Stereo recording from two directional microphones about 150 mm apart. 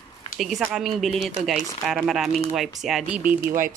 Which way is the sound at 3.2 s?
65° right (ahead or behind).